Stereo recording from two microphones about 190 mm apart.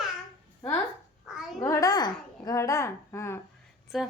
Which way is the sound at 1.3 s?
Centre (ahead or behind).